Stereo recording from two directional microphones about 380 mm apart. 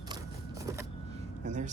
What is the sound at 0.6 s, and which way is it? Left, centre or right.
Vehicle, centre.